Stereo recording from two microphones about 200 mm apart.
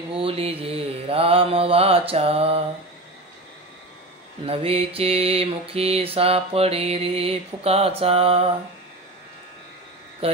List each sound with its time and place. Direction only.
0.1 s mantra: 30° right (ahead or behind)
4.5 s mantra: 30° right (ahead or behind)
10.2 s mantra: 30° right (ahead or behind)